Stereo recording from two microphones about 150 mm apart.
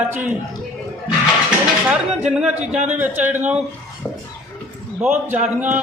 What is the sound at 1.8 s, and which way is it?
A man's voice, 5° right (ahead or behind).